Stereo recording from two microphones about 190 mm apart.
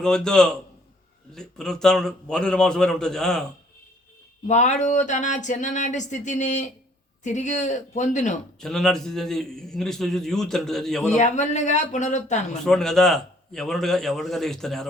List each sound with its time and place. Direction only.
0.0 s a man's voice: 5° left (ahead or behind)
4.4 s speech: 40° left (ahead or behind)
8.6 s a man's voice: 5° left (ahead or behind)
11.1 s speech: 40° left (ahead or behind)
12.6 s a man's voice: 5° left (ahead or behind)